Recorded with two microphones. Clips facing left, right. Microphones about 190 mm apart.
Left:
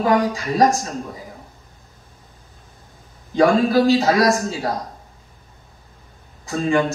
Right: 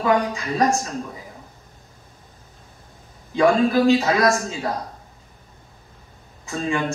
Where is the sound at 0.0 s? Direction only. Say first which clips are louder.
Left 2 dB; 35° left (ahead or behind).